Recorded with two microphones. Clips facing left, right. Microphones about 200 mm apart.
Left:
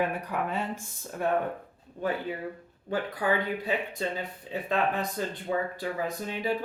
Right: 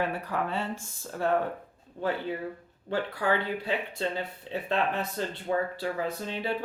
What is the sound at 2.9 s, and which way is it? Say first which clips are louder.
Speech: even; 15° left (ahead or behind).